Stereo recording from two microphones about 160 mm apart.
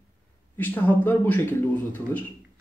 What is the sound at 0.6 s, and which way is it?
Speech, 10° left (ahead or behind).